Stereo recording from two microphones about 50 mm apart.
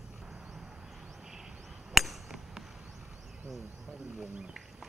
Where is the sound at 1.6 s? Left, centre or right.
Centre.